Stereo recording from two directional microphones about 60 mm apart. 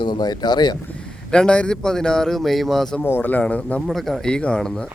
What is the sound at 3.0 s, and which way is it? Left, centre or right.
Speech, left.